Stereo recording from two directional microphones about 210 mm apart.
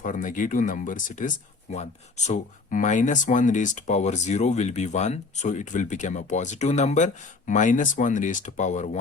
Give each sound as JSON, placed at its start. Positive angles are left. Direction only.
{"t": 0.0, "sound": "speech", "side_deg": 40}